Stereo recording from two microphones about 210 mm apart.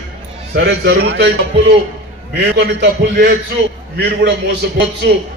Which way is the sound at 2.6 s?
55° right (ahead or behind).